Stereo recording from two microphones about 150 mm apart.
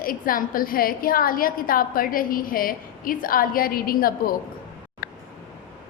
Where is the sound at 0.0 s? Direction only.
70° left (ahead or behind).